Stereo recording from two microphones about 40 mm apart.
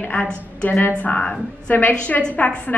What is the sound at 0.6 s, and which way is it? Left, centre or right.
Speech, left.